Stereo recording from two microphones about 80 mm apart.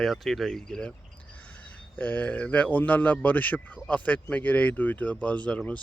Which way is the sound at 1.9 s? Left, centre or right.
Centre.